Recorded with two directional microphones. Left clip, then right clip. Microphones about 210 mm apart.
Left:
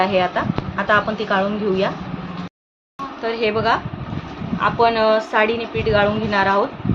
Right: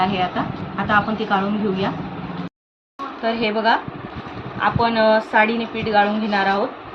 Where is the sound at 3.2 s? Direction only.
40° left (ahead or behind).